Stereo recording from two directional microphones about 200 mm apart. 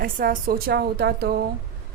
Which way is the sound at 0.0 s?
45° right (ahead or behind).